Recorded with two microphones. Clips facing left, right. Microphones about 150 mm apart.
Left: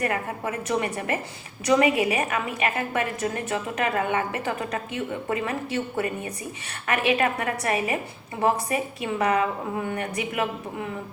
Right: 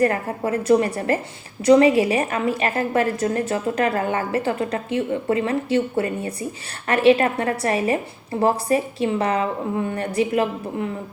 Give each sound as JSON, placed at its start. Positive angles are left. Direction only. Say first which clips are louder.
{"t": 0.0, "sound": "a woman's voice", "louder": "right 7 dB", "side_deg": -35}